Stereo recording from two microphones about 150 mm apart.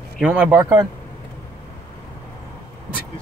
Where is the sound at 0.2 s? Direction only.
10° right (ahead or behind).